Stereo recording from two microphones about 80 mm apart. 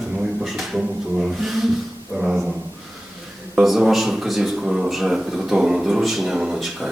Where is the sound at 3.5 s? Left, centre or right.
Centre.